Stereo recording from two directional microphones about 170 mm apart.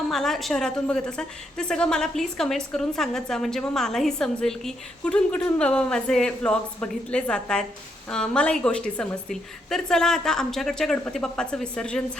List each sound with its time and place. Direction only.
0.1 s a woman's voice: centre (ahead or behind)